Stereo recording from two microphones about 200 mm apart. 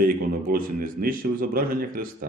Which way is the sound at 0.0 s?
45° right (ahead or behind).